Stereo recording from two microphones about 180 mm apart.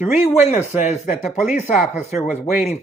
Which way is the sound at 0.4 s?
40° left (ahead or behind).